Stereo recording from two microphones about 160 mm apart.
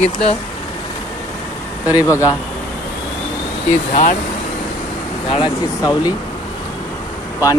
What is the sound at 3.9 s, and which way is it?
Speech, 50° left (ahead or behind).